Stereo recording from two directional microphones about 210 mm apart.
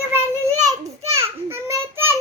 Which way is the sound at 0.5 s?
30° right (ahead or behind).